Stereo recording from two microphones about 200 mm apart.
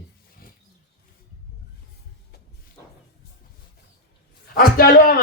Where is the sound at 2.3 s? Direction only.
55° left (ahead or behind).